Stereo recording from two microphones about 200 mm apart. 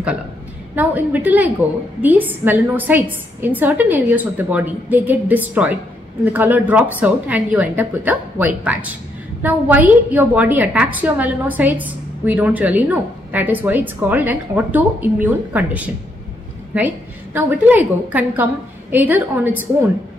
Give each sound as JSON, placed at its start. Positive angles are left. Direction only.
{"t": 0.7, "sound": "a woman's voice", "side_deg": -10}